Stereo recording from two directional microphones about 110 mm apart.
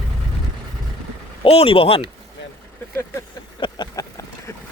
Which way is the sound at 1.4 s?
60° left (ahead or behind).